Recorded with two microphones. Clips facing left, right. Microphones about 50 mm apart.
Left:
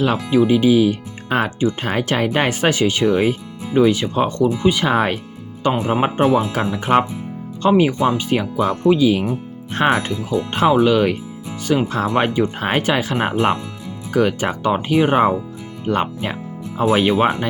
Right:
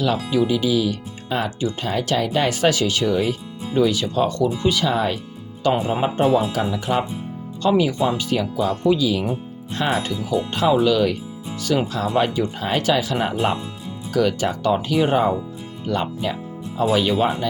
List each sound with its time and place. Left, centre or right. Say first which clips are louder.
0.0 s speech: left 4 dB; left
4.9 s speech: left 3 dB; left
14.1 s speech: left 2 dB; left